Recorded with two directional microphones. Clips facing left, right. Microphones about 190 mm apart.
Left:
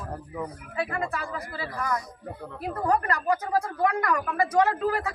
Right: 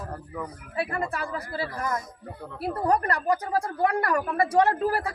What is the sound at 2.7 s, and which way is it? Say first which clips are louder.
A woman's voice: right 1 dB; 35° right (ahead or behind).